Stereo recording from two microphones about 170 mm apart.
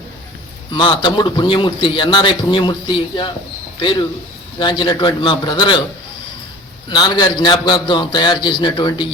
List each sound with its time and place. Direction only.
0.7 s a man's voice: 30° left (ahead or behind)
6.9 s a man's voice: 25° left (ahead or behind)